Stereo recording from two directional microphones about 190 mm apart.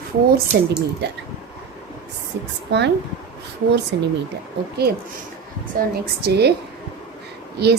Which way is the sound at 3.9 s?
65° right (ahead or behind).